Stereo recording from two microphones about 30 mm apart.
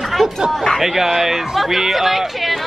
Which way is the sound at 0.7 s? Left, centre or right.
Centre.